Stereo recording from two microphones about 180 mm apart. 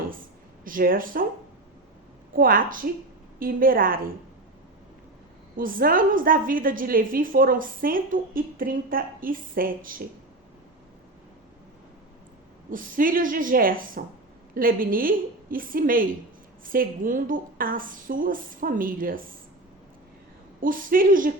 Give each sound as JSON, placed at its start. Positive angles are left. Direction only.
{"t": 0.6, "sound": "a woman's voice", "side_deg": -50}
{"t": 2.3, "sound": "a woman's voice", "side_deg": -50}
{"t": 5.5, "sound": "a woman's voice", "side_deg": -50}
{"t": 12.7, "sound": "a woman's voice", "side_deg": -50}
{"t": 20.6, "sound": "a woman's voice", "side_deg": -50}